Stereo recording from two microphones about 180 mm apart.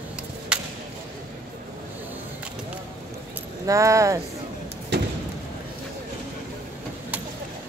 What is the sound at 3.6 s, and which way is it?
Speech, 15° right (ahead or behind).